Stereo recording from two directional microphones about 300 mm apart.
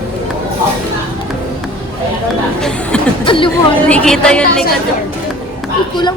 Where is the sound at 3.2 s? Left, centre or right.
Centre.